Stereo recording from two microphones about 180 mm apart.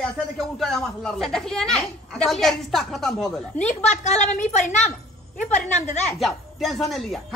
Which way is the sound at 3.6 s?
40° left (ahead or behind).